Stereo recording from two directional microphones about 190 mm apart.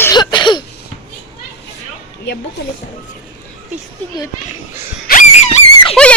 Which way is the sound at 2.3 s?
70° left (ahead or behind).